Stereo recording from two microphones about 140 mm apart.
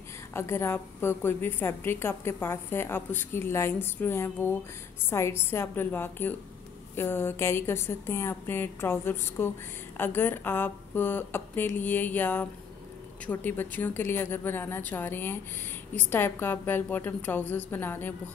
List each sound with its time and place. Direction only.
0.3 s a woman's voice: 20° left (ahead or behind)